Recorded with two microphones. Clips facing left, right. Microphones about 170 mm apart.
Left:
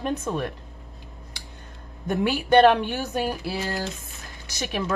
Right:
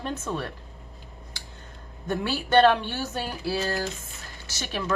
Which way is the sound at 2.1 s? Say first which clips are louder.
Left 4 dB; 15° left (ahead or behind).